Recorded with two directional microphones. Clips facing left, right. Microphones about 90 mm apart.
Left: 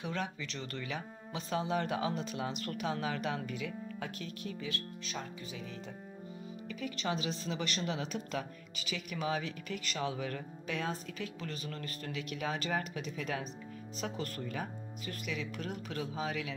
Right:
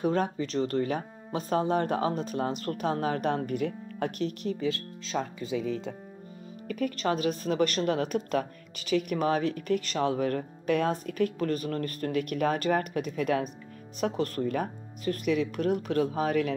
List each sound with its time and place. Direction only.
0.0 s a woman's voice: 40° right (ahead or behind); by 4.4 s 60° right (ahead or behind)
5.1 s speech: 90° right; by 5.9 s 75° right (ahead or behind)
6.7 s a woman's voice: 50° right (ahead or behind)